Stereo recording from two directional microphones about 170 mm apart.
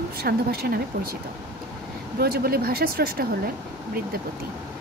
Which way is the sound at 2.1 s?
65° right (ahead or behind).